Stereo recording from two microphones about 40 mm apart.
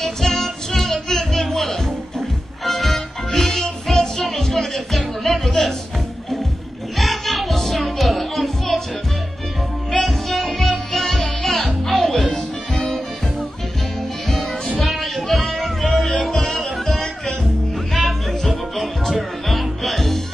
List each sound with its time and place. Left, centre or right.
0.0 s music: centre
7.0 s music: centre
9.8 s music: centre
15.0 s music: centre